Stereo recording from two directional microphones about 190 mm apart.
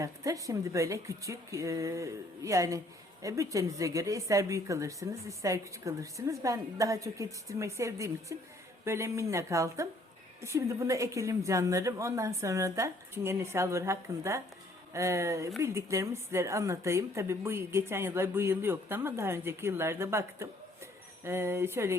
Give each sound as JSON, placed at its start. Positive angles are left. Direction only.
{"t": 0.0, "sound": "speech", "side_deg": -15}